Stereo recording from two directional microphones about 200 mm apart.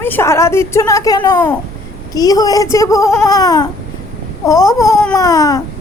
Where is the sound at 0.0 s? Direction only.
10° left (ahead or behind).